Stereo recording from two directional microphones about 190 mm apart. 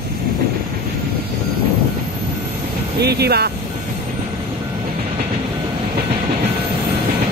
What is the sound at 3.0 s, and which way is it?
Speech, 60° right (ahead or behind).